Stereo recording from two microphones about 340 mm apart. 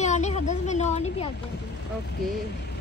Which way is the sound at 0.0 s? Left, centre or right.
Centre.